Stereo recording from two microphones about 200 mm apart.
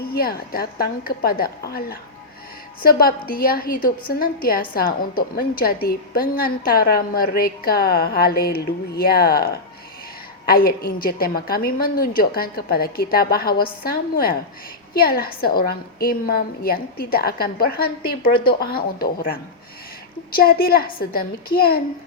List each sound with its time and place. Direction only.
0.0 s a woman's voice: 50° left (ahead or behind)